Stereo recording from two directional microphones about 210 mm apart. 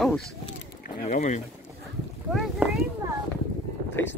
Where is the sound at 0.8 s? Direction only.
40° left (ahead or behind).